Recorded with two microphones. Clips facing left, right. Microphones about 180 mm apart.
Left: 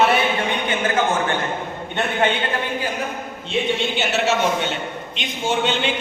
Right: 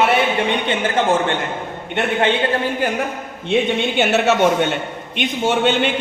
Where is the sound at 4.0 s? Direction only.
55° right (ahead or behind).